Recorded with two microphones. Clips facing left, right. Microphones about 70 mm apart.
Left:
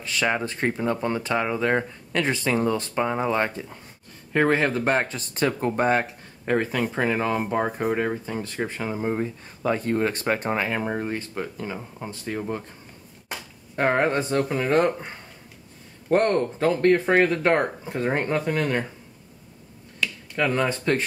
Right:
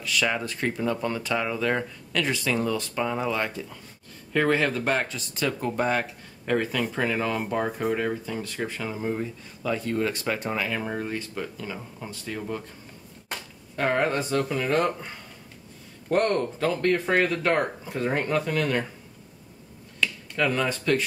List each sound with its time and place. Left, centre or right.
0.0 s speech: left
13.7 s speech: left
20.3 s speech: left